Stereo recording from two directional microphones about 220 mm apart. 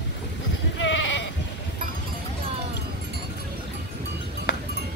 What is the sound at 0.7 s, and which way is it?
Sheep, 55° left (ahead or behind).